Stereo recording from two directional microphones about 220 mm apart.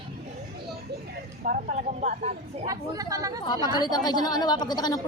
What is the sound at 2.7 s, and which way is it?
Speech, 15° right (ahead or behind).